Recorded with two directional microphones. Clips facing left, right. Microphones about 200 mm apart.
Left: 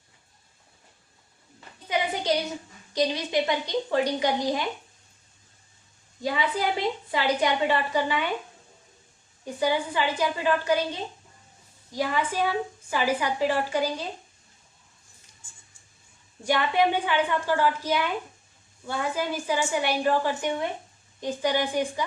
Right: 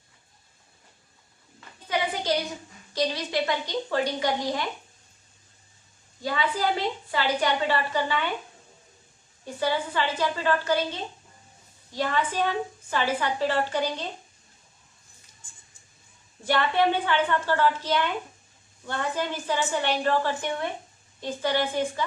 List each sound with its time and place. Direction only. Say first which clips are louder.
2.9 s a woman's voice: left 2 dB; 20° left (ahead or behind)
6.2 s a woman's voice: even; 15° left (ahead or behind)
9.4 s a woman's voice: left 2 dB; 15° left (ahead or behind)
16.4 s a woman's voice: even; 10° left (ahead or behind)